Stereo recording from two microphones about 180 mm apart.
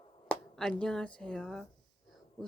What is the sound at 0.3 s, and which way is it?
Speech, 5° left (ahead or behind).